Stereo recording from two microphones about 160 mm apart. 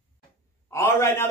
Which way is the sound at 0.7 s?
15° left (ahead or behind).